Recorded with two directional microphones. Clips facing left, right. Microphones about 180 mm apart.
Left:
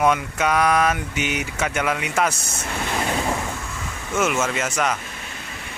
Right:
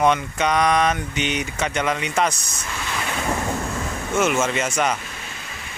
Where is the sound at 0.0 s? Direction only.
5° left (ahead or behind).